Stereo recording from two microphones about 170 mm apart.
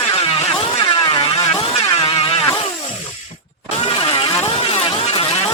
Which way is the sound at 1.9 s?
35° left (ahead or behind).